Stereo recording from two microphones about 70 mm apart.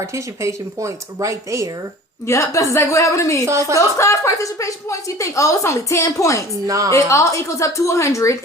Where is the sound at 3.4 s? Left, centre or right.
Right.